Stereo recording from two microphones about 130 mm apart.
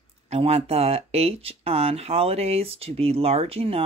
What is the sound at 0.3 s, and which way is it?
Speech, 50° right (ahead or behind).